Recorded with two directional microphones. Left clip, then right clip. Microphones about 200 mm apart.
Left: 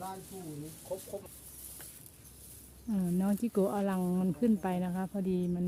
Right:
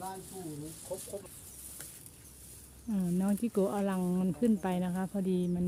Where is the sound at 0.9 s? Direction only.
10° right (ahead or behind).